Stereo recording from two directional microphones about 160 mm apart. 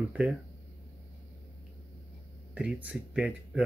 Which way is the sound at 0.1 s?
5° right (ahead or behind).